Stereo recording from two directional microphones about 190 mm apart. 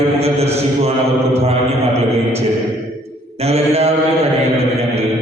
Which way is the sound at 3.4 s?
35° right (ahead or behind).